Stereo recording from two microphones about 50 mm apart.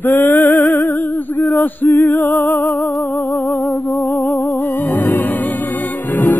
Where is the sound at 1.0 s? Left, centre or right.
Left.